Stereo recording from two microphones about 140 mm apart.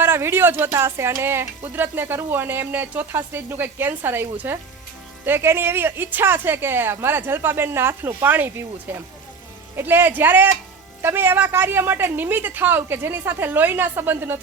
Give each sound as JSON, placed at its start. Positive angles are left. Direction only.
{"t": 0.0, "sound": "speech", "side_deg": -15}